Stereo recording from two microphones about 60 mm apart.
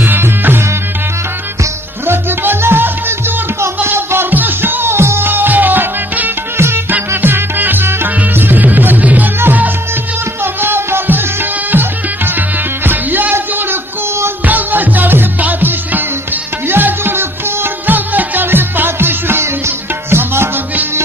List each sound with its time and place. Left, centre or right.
0.0 s music: right
2.0 s music: right
10.4 s music: right